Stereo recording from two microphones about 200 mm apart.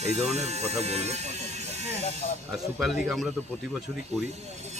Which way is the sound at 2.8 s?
Centre (ahead or behind).